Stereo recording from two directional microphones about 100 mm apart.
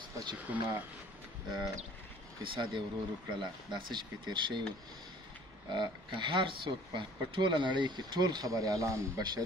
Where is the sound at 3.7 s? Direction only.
50° right (ahead or behind).